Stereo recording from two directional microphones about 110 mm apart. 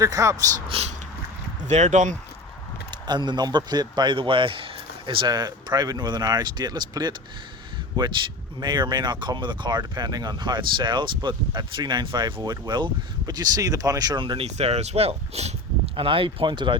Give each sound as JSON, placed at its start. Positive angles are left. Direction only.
{"t": 0.0, "sound": "speech", "side_deg": -30}
{"t": 0.7, "sound": "speech", "side_deg": -70}
{"t": 1.6, "sound": "speech", "side_deg": -90}
{"t": 2.9, "sound": "speech", "side_deg": -45}
{"t": 14.4, "sound": "speech", "side_deg": -70}
{"t": 16.0, "sound": "speech", "side_deg": -55}